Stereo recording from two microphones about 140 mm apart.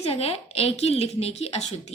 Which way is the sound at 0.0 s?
45° left (ahead or behind).